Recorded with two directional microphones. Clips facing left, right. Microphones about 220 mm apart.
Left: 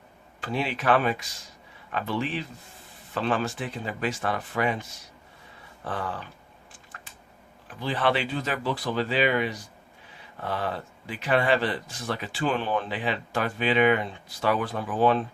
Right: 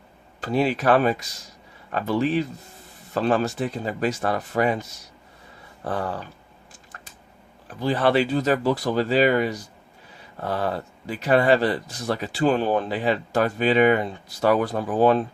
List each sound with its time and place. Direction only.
0.4 s speech: 40° right (ahead or behind)
7.7 s speech: 40° right (ahead or behind)